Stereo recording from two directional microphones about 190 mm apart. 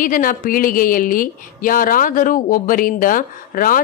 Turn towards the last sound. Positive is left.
turn(degrees=45)  # may be behind; listen again after turning